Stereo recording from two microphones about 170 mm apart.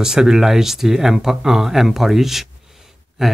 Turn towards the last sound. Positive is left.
turn(degrees=0)  # may be behind; listen again after turning